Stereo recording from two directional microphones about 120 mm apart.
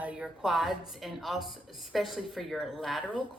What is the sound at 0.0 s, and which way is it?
A woman's voice, 10° right (ahead or behind).